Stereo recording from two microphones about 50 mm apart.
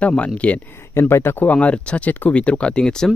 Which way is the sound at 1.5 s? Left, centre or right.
Centre.